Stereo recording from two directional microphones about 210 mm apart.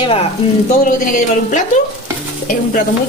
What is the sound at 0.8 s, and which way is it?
Stir, 35° left (ahead or behind).